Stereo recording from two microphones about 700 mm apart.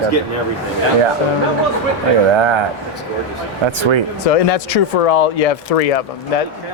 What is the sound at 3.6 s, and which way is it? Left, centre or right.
Speech, right.